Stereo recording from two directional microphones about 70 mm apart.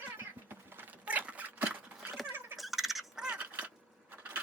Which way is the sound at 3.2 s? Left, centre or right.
Centre.